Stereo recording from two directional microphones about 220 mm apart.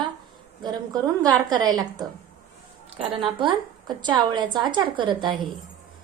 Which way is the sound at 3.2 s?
20° right (ahead or behind).